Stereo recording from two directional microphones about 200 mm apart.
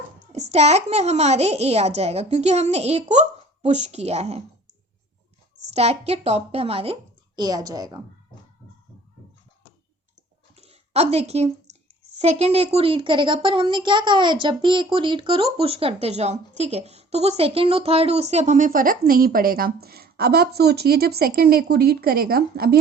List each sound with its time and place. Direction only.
0.3 s speech: 35° right (ahead or behind)
5.7 s a woman's voice: 30° right (ahead or behind)
10.5 s speech: 30° right (ahead or behind); by 22.8 s 50° right (ahead or behind)